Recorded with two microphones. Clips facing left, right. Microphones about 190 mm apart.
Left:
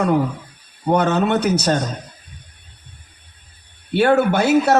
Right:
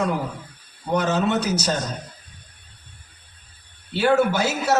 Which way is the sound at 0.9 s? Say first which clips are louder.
Left 4 dB; 60° left (ahead or behind).